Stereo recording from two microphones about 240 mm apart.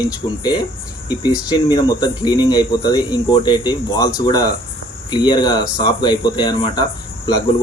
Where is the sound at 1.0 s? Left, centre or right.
Centre.